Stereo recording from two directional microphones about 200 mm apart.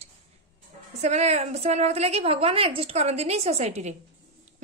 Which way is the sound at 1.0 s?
35° right (ahead or behind).